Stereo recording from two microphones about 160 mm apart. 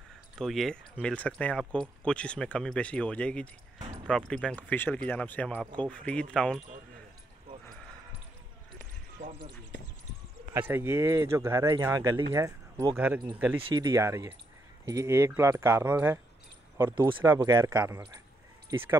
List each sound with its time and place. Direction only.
0.4 s speech: centre (ahead or behind)
9.2 s basketball bounce: 55° right (ahead or behind)
10.5 s speech: 15° right (ahead or behind)
13.6 s speech: 30° right (ahead or behind); by 16.2 s 15° right (ahead or behind)
17.2 s speech: 10° right (ahead or behind)
17.5 s speech: 25° right (ahead or behind)